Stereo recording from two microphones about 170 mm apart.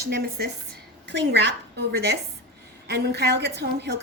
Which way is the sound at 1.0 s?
90° right.